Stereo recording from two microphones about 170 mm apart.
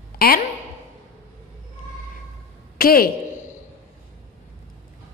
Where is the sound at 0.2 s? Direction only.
60° left (ahead or behind).